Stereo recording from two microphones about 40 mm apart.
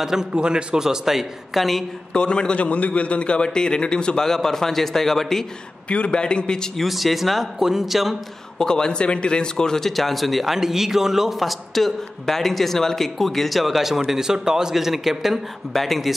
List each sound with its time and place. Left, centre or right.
0.0 s speech: centre
0.3 s a man's voice: right
0.7 s a man's voice: centre
2.1 s a man's voice: left
4.2 s a man's voice: centre
5.9 s a man's voice: left
6.8 s a man's voice: centre
7.5 s speech: centre
8.5 s a man's voice: centre
9.8 s a man's voice: centre
15.7 s a man's voice: centre